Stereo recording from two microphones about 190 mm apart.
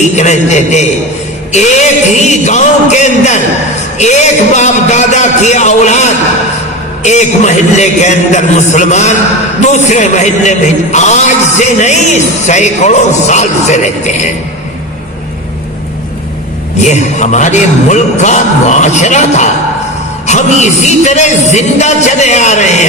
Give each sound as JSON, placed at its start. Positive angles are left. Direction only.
{"t": 0.1, "sound": "a man's voice", "side_deg": 40}
{"t": 16.8, "sound": "a man's voice", "side_deg": 40}